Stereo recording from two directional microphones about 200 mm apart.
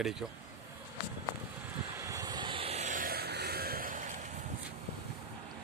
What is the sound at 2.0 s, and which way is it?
Vehicle, 15° right (ahead or behind).